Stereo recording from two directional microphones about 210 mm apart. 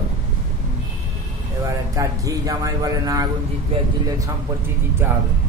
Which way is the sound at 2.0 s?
15° right (ahead or behind).